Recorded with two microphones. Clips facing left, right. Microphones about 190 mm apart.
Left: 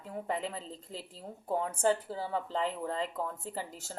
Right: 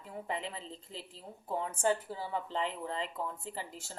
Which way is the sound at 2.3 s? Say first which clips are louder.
Left 2 dB; 40° left (ahead or behind).